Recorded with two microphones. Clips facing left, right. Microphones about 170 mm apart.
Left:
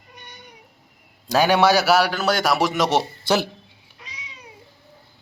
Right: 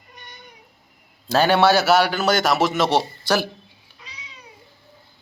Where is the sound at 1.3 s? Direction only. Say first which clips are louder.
Even; 15° left (ahead or behind).